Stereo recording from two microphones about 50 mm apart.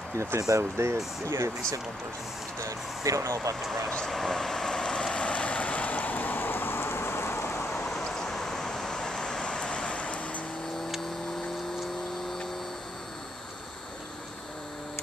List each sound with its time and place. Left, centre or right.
0.2 s speech: right
2.6 s speech: right
4.1 s vehicle: centre; by 7.4 s left
7.6 s vehicle: centre